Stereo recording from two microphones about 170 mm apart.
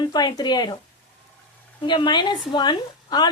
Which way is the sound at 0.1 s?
25° left (ahead or behind).